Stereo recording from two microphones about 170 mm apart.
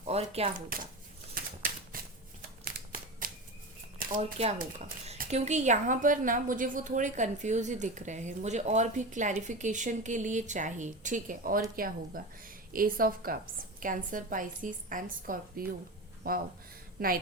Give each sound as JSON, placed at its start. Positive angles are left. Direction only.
{"t": 0.0, "sound": "speech", "side_deg": -35}
{"t": 1.4, "sound": "a sound", "side_deg": -55}
{"t": 3.9, "sound": "shuffling cards", "side_deg": -60}
{"t": 4.2, "sound": "a woman's voice", "side_deg": -40}